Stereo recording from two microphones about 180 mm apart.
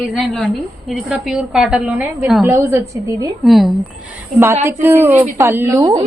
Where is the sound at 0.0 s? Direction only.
Centre (ahead or behind).